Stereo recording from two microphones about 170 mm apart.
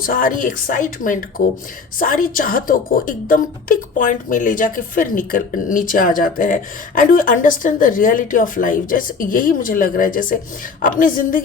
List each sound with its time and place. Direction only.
0.0 s a woman's voice: 55° left (ahead or behind)